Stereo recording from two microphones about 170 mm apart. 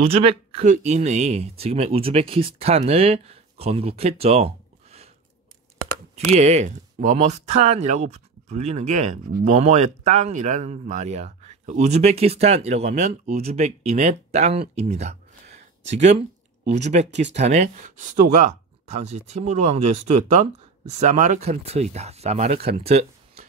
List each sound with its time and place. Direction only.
0.0 s speech: 35° right (ahead or behind)
6.1 s speech: 40° right (ahead or behind)